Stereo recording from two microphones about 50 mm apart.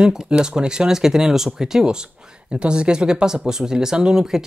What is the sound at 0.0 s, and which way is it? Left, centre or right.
Speech, centre.